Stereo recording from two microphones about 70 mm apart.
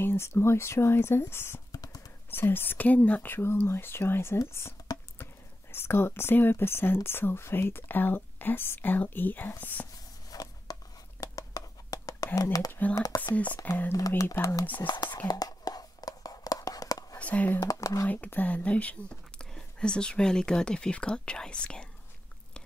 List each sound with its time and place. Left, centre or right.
0.0 s speech: left
1.7 s a sound: left
2.3 s speech: left
10.3 s a sound: left
12.9 s speech: left
13.2 s speech: left
13.9 s speech: left
14.9 s speech: left
15.2 s whispering: left
17.2 s speech: left
17.6 s speech: left
18.0 s speech: left